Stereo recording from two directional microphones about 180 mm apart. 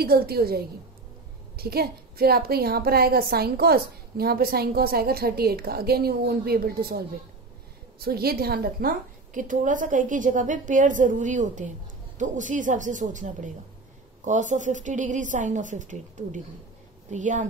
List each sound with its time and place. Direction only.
0.0 s a woman's voice: 60° right (ahead or behind); by 17.5 s 45° right (ahead or behind)